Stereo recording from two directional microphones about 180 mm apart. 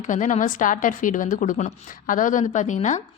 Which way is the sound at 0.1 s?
45° left (ahead or behind).